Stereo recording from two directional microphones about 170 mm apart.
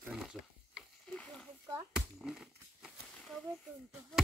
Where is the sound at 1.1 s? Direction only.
10° left (ahead or behind).